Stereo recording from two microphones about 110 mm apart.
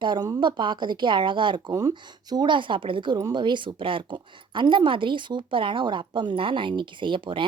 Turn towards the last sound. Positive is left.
turn(degrees=-50)  # may be behind; listen again after turning